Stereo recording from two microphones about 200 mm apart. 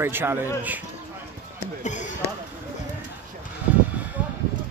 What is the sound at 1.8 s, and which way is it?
Speech, 35° left (ahead or behind).